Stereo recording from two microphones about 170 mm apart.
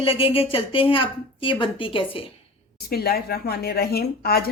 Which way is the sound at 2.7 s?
65° left (ahead or behind).